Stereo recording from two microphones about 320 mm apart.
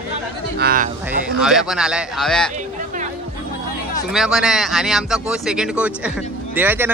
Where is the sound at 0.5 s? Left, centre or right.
Right.